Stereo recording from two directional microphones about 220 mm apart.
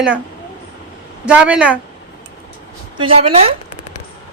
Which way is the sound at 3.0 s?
25° right (ahead or behind).